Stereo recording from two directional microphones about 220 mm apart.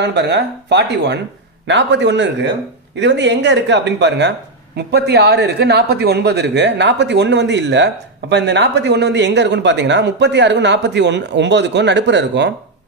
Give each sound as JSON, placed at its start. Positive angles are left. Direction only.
{"t": 0.0, "sound": "speech", "side_deg": -50}